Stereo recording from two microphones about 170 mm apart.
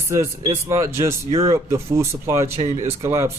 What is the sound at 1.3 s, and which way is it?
Speech, 35° right (ahead or behind).